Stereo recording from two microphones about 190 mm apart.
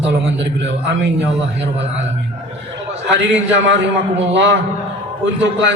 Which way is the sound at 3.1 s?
70° right (ahead or behind).